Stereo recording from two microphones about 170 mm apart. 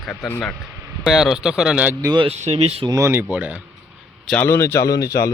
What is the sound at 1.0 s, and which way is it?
Speech, centre (ahead or behind).